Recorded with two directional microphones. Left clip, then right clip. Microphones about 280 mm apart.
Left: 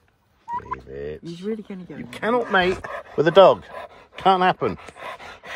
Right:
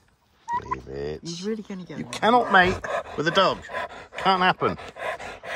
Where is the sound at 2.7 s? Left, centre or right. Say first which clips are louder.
Even; right.